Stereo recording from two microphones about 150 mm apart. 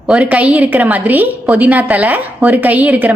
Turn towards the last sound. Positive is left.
turn(degrees=-10)  # may be behind; listen again after turning